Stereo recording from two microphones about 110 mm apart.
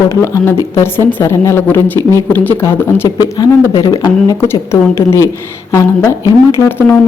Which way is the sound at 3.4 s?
35° left (ahead or behind).